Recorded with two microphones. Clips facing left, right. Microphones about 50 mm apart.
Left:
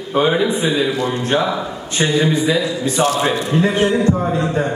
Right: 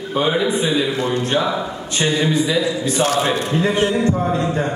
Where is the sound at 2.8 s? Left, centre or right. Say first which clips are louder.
Left 1 dB; left.